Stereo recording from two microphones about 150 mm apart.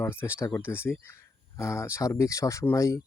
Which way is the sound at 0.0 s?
15° left (ahead or behind).